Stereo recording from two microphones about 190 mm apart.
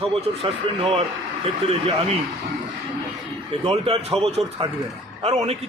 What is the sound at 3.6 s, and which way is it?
Speech, 30° right (ahead or behind).